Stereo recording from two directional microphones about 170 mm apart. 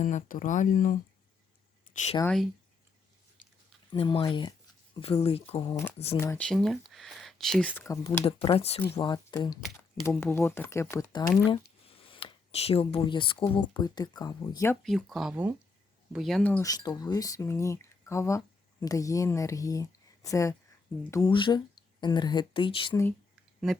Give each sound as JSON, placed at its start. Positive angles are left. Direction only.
{"t": 0.0, "sound": "speech", "side_deg": 45}
{"t": 1.9, "sound": "a sound", "side_deg": 45}
{"t": 2.2, "sound": "speech", "side_deg": 5}
{"t": 3.8, "sound": "speech", "side_deg": 30}
{"t": 6.1, "sound": "speech", "side_deg": 10}
{"t": 8.0, "sound": "speech", "side_deg": 35}
{"t": 9.0, "sound": "speech", "side_deg": 25}
{"t": 14.8, "sound": "speech", "side_deg": 0}
{"t": 16.6, "sound": "speech", "side_deg": 20}
{"t": 21.3, "sound": "speech", "side_deg": 30}
{"t": 23.3, "sound": "a sound", "side_deg": 0}